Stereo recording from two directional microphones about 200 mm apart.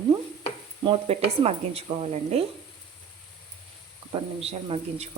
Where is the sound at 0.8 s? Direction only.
30° right (ahead or behind).